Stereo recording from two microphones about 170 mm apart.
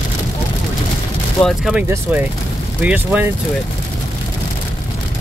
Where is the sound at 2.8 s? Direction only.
10° right (ahead or behind).